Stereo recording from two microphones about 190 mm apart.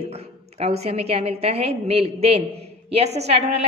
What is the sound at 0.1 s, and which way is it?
A woman's voice, 30° right (ahead or behind).